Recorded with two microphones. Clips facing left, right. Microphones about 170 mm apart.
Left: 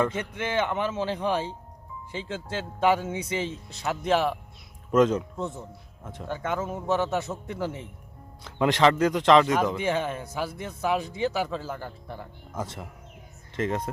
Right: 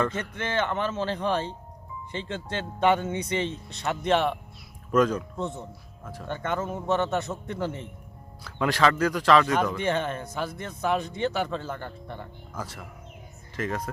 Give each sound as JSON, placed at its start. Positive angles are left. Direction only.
{"t": 0.0, "sound": "a man's voice", "side_deg": 10}
{"t": 4.9, "sound": "speech", "side_deg": 25}
{"t": 5.4, "sound": "speech", "side_deg": 5}
{"t": 8.4, "sound": "speech", "side_deg": 20}
{"t": 9.7, "sound": "speech", "side_deg": 5}
{"t": 12.5, "sound": "speech", "side_deg": 25}